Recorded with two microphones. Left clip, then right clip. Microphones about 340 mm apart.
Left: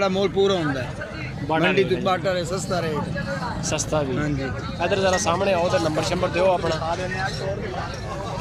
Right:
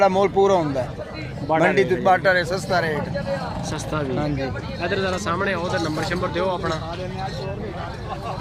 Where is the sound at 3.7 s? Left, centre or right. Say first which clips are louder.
Left 4 dB; centre.